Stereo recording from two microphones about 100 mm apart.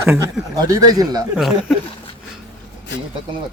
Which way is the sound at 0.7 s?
40° right (ahead or behind).